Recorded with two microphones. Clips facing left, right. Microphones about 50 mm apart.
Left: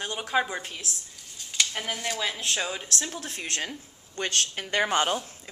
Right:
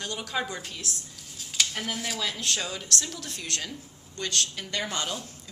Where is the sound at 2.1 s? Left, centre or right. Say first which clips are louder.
Left 1 dB; left.